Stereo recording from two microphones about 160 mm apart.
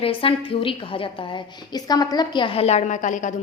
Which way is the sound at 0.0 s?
35° left (ahead or behind).